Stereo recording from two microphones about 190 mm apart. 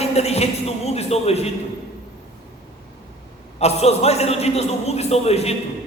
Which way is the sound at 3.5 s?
35° left (ahead or behind).